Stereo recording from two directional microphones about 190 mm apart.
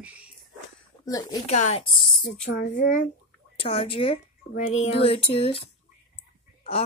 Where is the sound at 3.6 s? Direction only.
30° left (ahead or behind).